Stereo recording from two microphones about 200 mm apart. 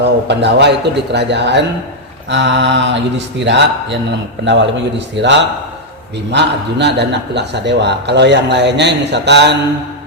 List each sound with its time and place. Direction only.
0.0 s a man's voice: 60° right (ahead or behind)